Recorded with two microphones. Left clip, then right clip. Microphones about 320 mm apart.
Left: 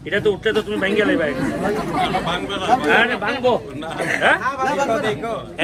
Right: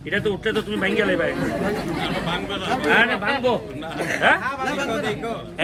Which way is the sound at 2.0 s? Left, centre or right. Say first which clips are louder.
Left 5 dB; centre.